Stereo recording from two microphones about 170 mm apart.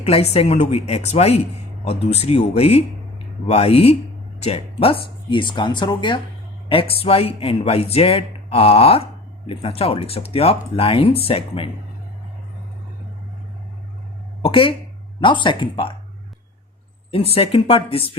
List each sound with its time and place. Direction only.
0.0 s speech: 35° left (ahead or behind)
14.4 s speech: 30° left (ahead or behind)
17.1 s speech: 35° left (ahead or behind)